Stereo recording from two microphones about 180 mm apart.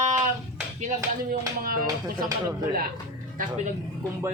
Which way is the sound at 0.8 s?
55° right (ahead or behind).